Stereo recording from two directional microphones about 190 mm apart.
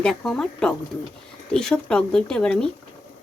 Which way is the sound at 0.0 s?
Centre (ahead or behind).